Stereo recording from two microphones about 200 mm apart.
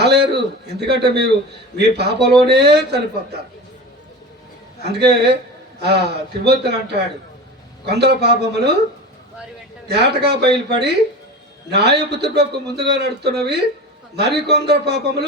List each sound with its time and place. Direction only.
0.0 s a man's voice: 55° right (ahead or behind)
4.8 s a man's voice: 55° right (ahead or behind)
9.8 s a man's voice: 55° right (ahead or behind)